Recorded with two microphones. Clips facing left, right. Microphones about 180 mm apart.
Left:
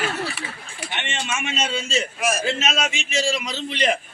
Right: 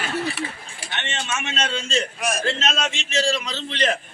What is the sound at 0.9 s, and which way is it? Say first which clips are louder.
A man's voice: even; 10° left (ahead or behind).